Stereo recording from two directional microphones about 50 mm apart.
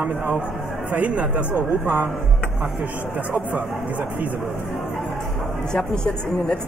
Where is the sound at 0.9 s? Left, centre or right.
Right.